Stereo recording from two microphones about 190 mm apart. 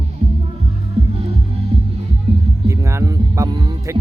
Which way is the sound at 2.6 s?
15° right (ahead or behind).